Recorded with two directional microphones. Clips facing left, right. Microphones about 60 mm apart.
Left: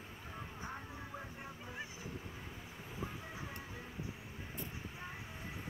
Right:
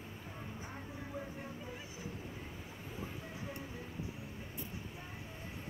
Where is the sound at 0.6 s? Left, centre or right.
Left.